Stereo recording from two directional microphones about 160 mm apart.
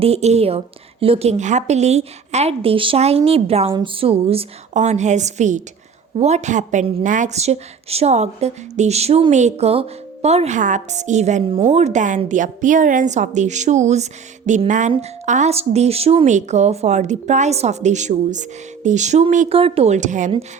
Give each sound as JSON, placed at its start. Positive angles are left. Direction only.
{"t": 0.0, "sound": "a woman's voice", "side_deg": -40}
{"t": 4.7, "sound": "a woman's voice", "side_deg": -45}
{"t": 19.5, "sound": "a woman's voice", "side_deg": -35}